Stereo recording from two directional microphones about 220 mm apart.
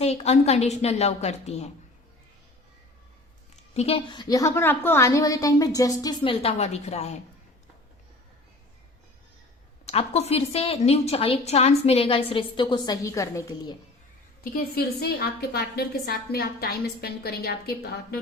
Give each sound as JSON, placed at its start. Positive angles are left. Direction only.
{"t": 0.0, "sound": "a woman's voice", "side_deg": 30}
{"t": 3.5, "sound": "a woman's voice", "side_deg": 30}
{"t": 9.8, "sound": "a woman's voice", "side_deg": 25}
{"t": 14.5, "sound": "a woman's voice", "side_deg": 45}